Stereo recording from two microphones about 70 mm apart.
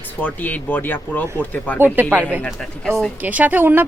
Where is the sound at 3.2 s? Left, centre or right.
Right.